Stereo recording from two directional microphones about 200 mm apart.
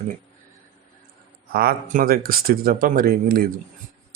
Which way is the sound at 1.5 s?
45° right (ahead or behind).